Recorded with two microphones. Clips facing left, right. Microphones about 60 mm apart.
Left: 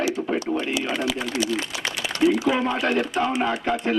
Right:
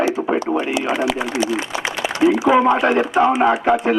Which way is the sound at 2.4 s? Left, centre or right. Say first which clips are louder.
Right 8 dB; centre.